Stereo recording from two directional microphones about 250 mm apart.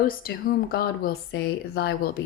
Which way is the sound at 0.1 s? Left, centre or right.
Left.